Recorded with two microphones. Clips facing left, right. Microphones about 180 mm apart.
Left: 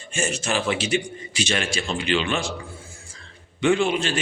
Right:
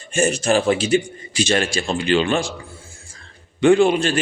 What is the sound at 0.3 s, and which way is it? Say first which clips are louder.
A man's voice: right 7 dB; 45° right (ahead or behind).